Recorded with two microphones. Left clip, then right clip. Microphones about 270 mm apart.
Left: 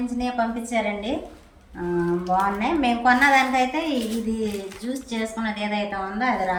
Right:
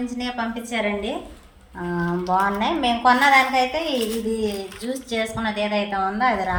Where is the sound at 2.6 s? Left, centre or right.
Centre.